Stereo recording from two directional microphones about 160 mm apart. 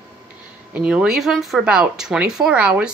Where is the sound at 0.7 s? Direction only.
5° right (ahead or behind).